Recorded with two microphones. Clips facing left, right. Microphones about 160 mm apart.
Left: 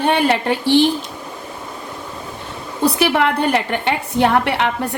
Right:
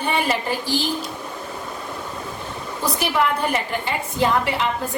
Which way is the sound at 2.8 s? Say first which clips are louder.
Left 5 dB; 70° left (ahead or behind).